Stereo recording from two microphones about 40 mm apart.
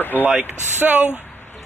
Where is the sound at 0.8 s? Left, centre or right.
Right.